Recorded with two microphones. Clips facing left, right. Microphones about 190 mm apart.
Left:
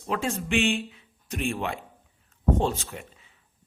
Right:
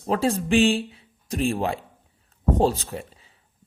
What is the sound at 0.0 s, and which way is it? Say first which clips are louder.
Speech: right 6 dB; 35° right (ahead or behind).